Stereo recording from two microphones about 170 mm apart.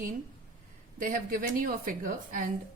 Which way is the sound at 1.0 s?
55° right (ahead or behind).